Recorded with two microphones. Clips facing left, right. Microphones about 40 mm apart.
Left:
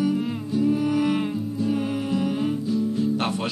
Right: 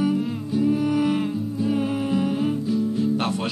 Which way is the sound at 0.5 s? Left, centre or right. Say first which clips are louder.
Right 1 dB; centre.